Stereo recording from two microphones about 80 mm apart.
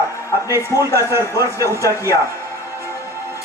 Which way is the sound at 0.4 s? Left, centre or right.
Right.